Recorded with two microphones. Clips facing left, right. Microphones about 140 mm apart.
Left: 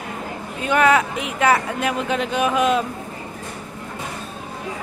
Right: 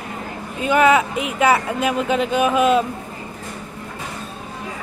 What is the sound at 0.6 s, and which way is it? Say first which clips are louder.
Speech: right 2 dB; 5° right (ahead or behind).